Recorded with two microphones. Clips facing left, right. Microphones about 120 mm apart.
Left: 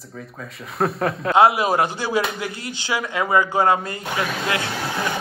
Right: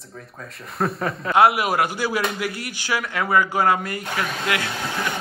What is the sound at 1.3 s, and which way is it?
Speech, 20° left (ahead or behind).